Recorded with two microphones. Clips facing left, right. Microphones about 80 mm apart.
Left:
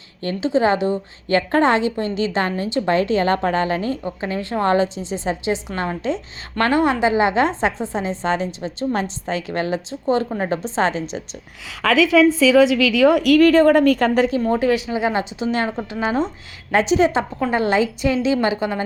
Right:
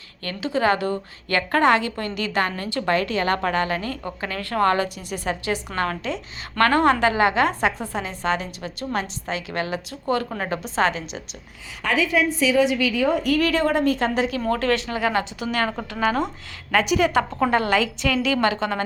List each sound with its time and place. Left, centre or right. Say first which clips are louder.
0.2 s a woman's voice: left 5 dB; left
11.7 s a woman's voice: left 6 dB; left
13.4 s a woman's voice: left 8 dB; left
14.5 s a woman's voice: left 4 dB; centre